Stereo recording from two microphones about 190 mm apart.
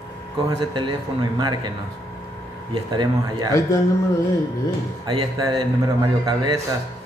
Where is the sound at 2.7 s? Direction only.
25° right (ahead or behind).